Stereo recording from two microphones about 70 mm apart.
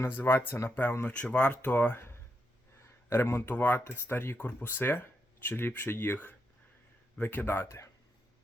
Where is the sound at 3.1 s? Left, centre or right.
Left.